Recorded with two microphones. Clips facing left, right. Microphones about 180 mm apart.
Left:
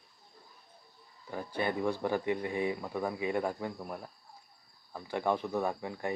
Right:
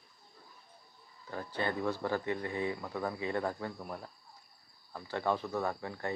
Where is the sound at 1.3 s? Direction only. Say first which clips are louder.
Left 2 dB; 15° left (ahead or behind).